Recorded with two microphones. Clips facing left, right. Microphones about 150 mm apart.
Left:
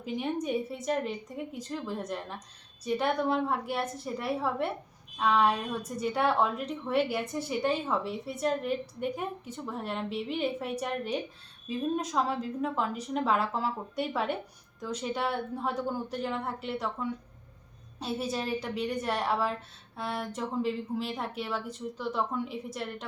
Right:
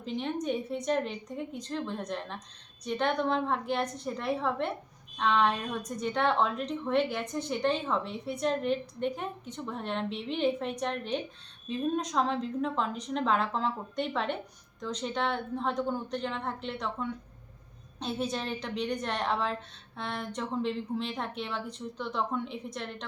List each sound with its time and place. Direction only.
0.0 s a woman's voice: 10° left (ahead or behind)